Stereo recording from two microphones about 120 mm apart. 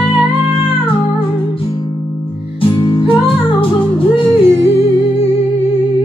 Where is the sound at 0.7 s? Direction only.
50° left (ahead or behind).